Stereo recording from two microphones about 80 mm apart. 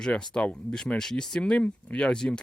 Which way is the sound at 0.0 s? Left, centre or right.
Centre.